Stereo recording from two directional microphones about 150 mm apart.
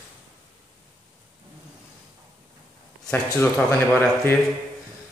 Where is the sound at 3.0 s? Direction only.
15° left (ahead or behind).